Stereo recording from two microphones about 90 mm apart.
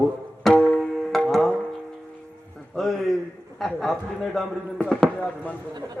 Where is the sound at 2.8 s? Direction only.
5° left (ahead or behind).